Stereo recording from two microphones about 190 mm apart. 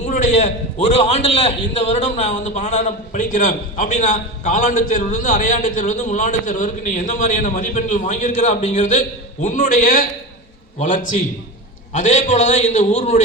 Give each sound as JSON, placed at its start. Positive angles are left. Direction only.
{"t": 0.0, "sound": "a man's voice", "side_deg": 40}